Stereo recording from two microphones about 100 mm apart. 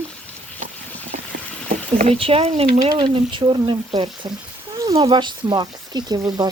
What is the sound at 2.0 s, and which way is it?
Speech, 70° right (ahead or behind).